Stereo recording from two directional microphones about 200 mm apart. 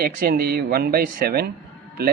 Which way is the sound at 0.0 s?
50° right (ahead or behind).